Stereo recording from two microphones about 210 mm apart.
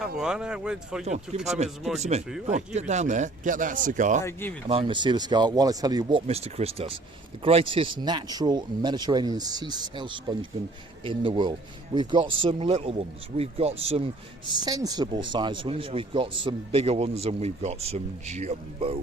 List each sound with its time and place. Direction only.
0.2 s speech: 5° right (ahead or behind)
1.0 s speech: 30° right (ahead or behind)
4.2 s speech: 10° left (ahead or behind)
4.7 s speech: 25° right (ahead or behind)